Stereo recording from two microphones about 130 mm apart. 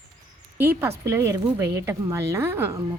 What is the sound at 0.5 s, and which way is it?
A woman's voice, 15° right (ahead or behind).